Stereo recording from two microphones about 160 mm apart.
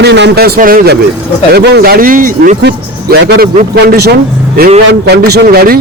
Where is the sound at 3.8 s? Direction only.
90° right.